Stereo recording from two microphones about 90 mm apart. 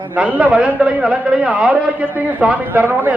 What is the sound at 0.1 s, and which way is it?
A man's voice, 15° right (ahead or behind).